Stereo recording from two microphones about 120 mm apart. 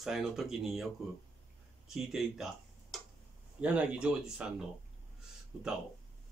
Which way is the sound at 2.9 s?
Centre (ahead or behind).